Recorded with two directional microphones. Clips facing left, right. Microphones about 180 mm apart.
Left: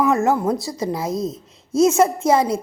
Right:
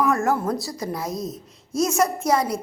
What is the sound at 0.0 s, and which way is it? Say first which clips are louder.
Speech: left 4 dB; 20° left (ahead or behind).